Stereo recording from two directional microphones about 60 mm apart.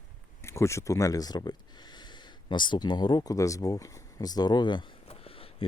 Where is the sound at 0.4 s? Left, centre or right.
Left.